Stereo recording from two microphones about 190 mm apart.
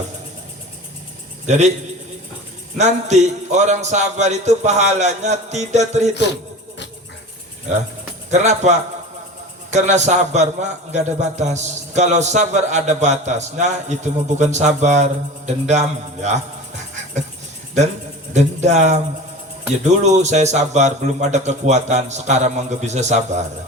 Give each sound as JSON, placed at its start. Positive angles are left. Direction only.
{"t": 1.5, "sound": "a man's voice", "side_deg": -35}
{"t": 2.7, "sound": "a man's voice", "side_deg": -40}
{"t": 8.3, "sound": "a man's voice", "side_deg": -35}
{"t": 18.3, "sound": "a man's voice", "side_deg": -35}